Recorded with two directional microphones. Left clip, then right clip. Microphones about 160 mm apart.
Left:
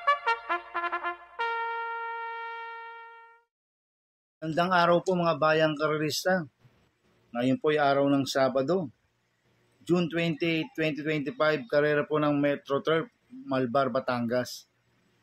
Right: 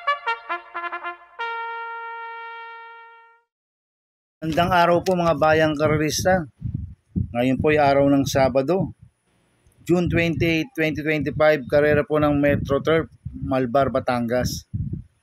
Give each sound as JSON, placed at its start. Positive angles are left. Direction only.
{"t": 0.0, "sound": "trumpet", "side_deg": -5}
{"t": 4.4, "sound": "speech", "side_deg": -45}
{"t": 9.8, "sound": "speech", "side_deg": -55}